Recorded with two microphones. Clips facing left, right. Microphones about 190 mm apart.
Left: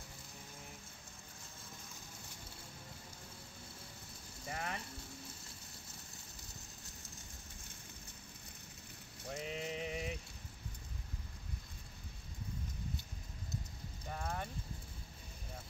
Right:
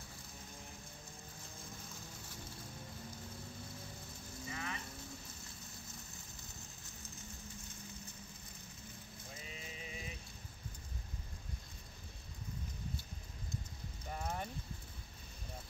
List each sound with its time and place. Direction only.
4.5 s vehicle: 55° left (ahead or behind)
9.3 s a sound: 70° left (ahead or behind)
14.1 s vehicle: 5° right (ahead or behind)